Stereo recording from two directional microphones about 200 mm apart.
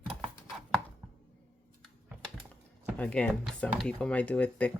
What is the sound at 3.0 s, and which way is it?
Speech, 5° left (ahead or behind).